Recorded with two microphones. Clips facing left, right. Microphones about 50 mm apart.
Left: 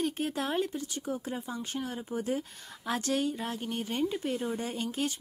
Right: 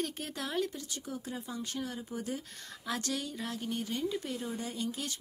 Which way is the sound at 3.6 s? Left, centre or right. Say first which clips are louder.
Left 2 dB; left.